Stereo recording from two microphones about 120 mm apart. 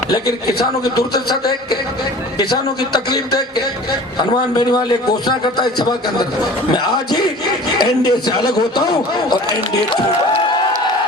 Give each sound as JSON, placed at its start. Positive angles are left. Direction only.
{"t": 1.1, "sound": "a man's voice", "side_deg": 35}